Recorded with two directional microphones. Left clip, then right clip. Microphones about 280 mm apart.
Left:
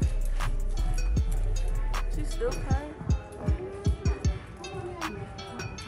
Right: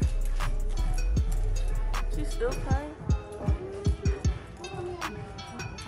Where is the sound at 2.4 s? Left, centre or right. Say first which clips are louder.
Even; right.